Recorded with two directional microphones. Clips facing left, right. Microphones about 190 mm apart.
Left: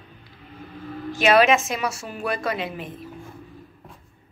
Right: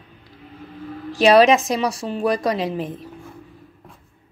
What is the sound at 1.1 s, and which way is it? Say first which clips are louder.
A woman's voice: right 4 dB; 35° right (ahead or behind).